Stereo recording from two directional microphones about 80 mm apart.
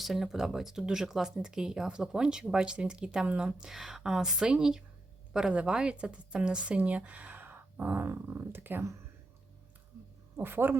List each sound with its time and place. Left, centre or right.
0.0 s speech: centre; by 8.9 s right
10.3 s speech: right